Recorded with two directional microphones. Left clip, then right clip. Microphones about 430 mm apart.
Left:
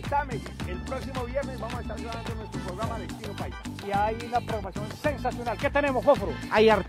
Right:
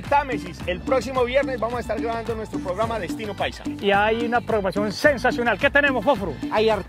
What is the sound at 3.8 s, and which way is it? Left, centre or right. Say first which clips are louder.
Speech: right 8 dB; right.